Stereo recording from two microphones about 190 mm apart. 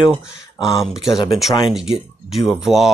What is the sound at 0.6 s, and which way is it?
Speech, centre (ahead or behind).